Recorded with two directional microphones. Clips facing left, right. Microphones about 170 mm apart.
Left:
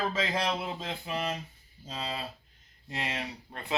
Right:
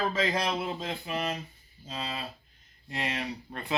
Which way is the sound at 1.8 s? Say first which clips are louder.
Even; 30° left (ahead or behind).